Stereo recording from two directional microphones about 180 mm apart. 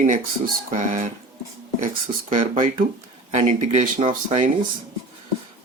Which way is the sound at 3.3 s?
40° right (ahead or behind).